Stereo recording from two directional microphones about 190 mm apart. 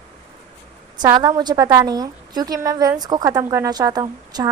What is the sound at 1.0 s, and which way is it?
A woman's voice, 20° right (ahead or behind).